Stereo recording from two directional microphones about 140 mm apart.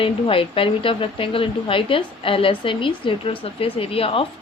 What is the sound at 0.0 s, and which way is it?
A woman's voice, 40° left (ahead or behind).